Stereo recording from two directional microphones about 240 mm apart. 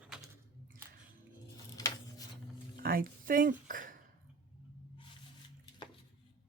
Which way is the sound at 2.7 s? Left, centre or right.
Right.